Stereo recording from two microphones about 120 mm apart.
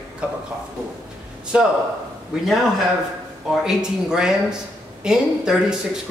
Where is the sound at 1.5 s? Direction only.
10° right (ahead or behind).